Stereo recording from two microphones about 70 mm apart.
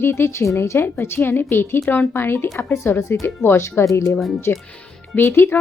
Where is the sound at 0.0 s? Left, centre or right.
Left.